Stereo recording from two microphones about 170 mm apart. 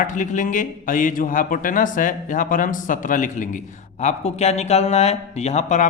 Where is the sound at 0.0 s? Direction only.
50° left (ahead or behind).